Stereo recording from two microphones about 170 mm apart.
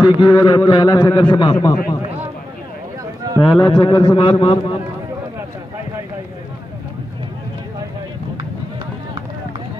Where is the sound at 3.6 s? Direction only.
25° left (ahead or behind).